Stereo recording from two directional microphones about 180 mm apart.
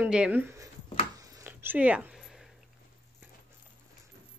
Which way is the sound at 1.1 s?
20° right (ahead or behind).